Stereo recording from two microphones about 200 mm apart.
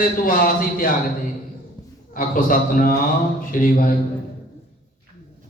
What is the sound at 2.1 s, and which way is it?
A man's voice, 45° left (ahead or behind).